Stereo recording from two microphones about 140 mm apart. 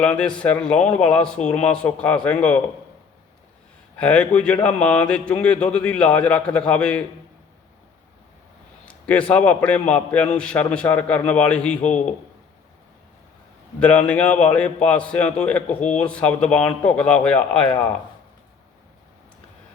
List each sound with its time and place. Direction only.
0.0 s speech: 5° left (ahead or behind)
3.9 s speech: 10° left (ahead or behind)
9.0 s speech: 10° left (ahead or behind)
11.8 s a man's voice: 55° left (ahead or behind)
13.7 s speech: 10° left (ahead or behind)